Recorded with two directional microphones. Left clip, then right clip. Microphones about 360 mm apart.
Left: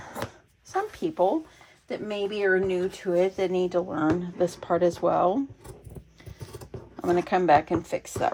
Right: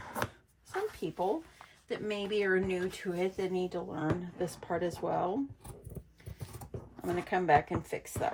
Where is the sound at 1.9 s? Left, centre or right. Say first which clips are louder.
Left 4 dB; centre.